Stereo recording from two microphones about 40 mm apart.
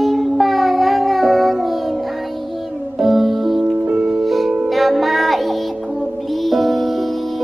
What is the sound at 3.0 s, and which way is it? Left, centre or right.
Music, centre.